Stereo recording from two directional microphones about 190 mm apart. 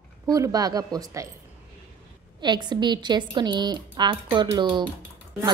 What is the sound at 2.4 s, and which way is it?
A woman's voice, 25° right (ahead or behind).